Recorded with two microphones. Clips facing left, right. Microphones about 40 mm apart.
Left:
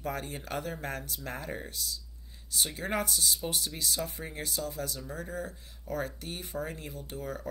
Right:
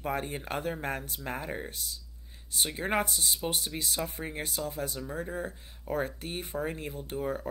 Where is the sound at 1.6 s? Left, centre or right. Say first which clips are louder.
Left 1 dB; right.